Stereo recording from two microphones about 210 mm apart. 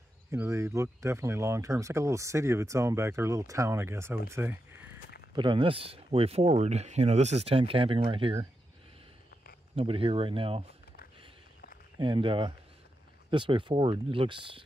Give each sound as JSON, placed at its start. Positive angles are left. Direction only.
{"t": 0.3, "sound": "speech", "side_deg": -15}
{"t": 5.3, "sound": "speech", "side_deg": -20}
{"t": 9.8, "sound": "speech", "side_deg": -25}
{"t": 12.0, "sound": "speech", "side_deg": -20}